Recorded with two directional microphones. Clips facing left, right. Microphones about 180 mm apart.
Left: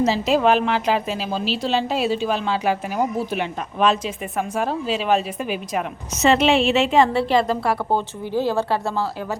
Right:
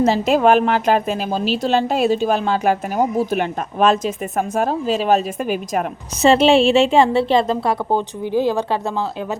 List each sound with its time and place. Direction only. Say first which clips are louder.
0.0 s a woman's voice: right 3 dB; 50° right (ahead or behind)
6.1 s a woman's voice: right 4 dB; 30° right (ahead or behind)